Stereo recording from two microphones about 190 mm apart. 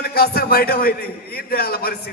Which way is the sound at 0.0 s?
55° left (ahead or behind).